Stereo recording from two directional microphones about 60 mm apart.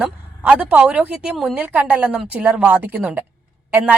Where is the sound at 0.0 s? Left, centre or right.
Right.